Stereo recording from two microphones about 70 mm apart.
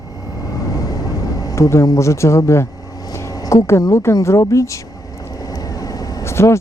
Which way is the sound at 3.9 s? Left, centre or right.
Left.